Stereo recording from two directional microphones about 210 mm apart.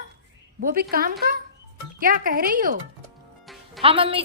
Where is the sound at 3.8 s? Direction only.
25° right (ahead or behind).